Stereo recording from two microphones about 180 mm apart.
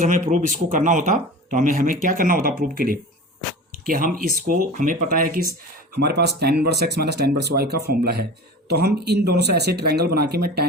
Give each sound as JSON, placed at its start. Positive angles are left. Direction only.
{"t": 0.0, "sound": "speech", "side_deg": -40}
{"t": 6.0, "sound": "speech", "side_deg": -70}